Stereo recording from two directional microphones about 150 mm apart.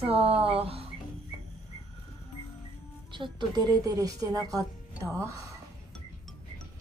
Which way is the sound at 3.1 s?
30° right (ahead or behind).